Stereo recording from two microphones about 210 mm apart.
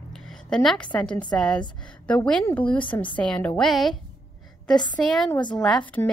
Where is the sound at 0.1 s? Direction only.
Centre (ahead or behind).